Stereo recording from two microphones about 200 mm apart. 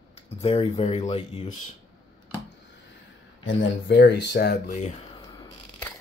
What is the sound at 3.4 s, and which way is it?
Speech, 60° left (ahead or behind).